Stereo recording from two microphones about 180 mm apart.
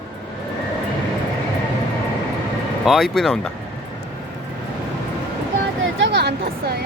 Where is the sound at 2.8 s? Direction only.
Centre (ahead or behind).